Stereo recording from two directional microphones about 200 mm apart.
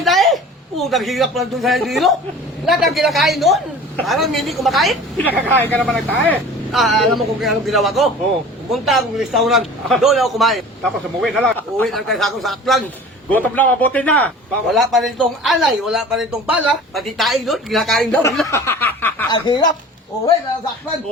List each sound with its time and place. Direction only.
0.0 s a sound: centre (ahead or behind)
0.8 s a man's voice: centre (ahead or behind)
18.4 s snicker: 15° left (ahead or behind)
19.3 s speech: 20° left (ahead or behind)